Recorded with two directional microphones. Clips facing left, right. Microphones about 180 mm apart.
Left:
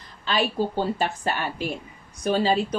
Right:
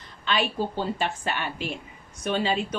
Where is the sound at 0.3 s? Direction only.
35° left (ahead or behind).